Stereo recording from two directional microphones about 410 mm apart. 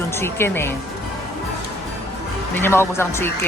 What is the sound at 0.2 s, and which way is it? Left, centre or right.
Speech, centre.